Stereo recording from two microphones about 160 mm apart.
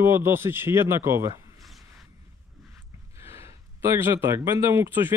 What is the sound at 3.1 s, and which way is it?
Speech, 15° right (ahead or behind).